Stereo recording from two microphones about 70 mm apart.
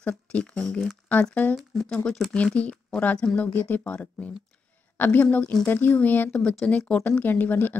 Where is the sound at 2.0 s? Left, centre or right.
Centre.